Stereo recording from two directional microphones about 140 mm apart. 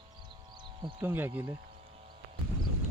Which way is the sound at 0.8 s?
35° right (ahead or behind).